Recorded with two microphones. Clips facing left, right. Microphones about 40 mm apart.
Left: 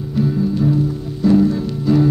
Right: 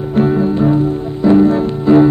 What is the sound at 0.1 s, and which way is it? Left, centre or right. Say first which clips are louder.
Music: right 5 dB; right.